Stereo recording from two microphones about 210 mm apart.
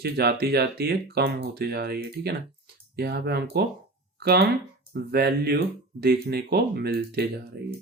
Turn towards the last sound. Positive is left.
turn(degrees=-50)  # may be behind; listen again after turning